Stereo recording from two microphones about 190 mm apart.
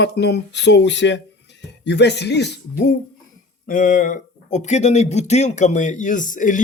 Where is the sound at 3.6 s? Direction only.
45° left (ahead or behind).